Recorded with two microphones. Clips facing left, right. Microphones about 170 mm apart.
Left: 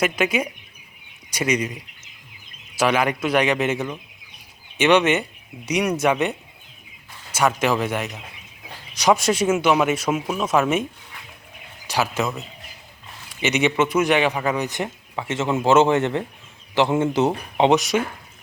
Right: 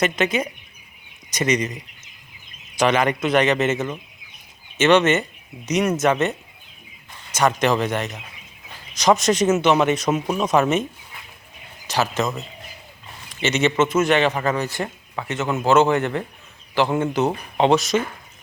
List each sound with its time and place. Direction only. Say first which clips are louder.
0.0 s a man's voice: even; 10° left (ahead or behind)
7.3 s a man's voice: right 1 dB; 5° left (ahead or behind)
11.9 s a man's voice: right 1 dB; 10° left (ahead or behind)
13.3 s a man's voice: right 1 dB; 10° left (ahead or behind)
17.2 s a man's voice: even; 15° left (ahead or behind)